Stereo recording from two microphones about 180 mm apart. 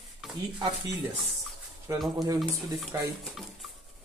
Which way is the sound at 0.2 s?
Centre (ahead or behind).